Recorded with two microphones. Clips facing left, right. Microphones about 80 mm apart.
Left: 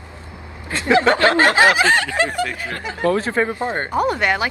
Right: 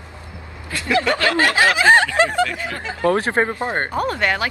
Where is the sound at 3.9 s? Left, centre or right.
Centre.